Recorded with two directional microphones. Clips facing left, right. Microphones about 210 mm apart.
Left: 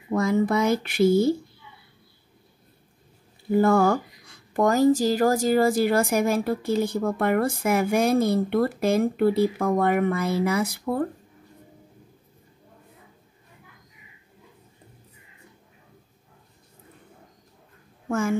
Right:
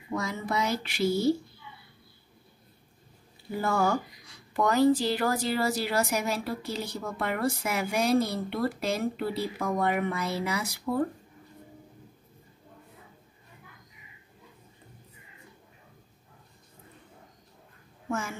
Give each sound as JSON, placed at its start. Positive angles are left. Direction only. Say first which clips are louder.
{"t": 0.1, "sound": "speech", "louder": "left 9 dB", "side_deg": 50}
{"t": 3.5, "sound": "speech", "louder": "left 8 dB", "side_deg": 55}